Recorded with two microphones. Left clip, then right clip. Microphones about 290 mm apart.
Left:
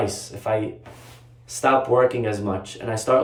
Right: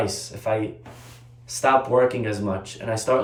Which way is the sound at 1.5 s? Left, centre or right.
Centre.